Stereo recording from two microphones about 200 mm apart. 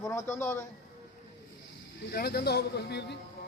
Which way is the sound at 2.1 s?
50° left (ahead or behind).